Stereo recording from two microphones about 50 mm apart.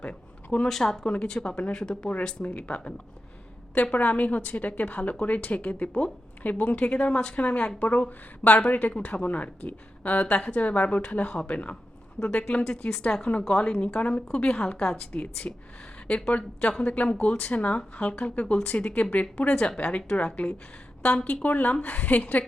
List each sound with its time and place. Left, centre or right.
0.0 s a sound: left
0.7 s speech: centre
1.0 s a woman's voice: left
3.9 s a woman's voice: left
6.7 s a woman's voice: left
13.6 s a woman's voice: left